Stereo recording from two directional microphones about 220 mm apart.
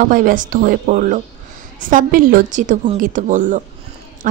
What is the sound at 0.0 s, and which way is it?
A woman's voice, 40° right (ahead or behind).